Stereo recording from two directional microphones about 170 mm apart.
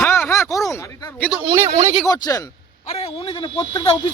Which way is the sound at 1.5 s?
35° right (ahead or behind).